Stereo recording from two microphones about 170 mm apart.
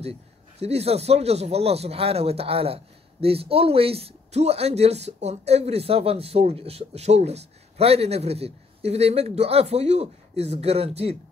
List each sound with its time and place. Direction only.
0.6 s speech: 40° right (ahead or behind)